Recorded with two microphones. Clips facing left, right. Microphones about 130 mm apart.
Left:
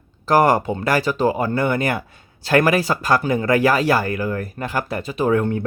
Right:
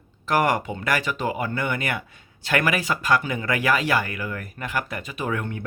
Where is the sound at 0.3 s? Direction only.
35° left (ahead or behind).